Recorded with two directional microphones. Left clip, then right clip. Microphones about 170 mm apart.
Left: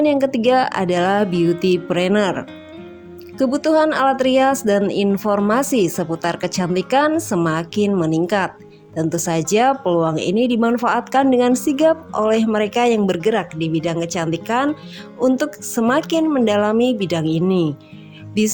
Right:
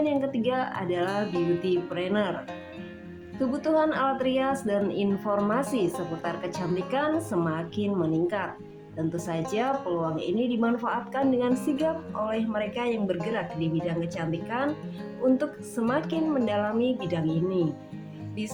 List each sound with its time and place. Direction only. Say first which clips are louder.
0.0 s speech: left 10 dB; 60° left (ahead or behind)
3.3 s a woman's voice: left 9 dB; 55° left (ahead or behind); by 18.5 s 80° left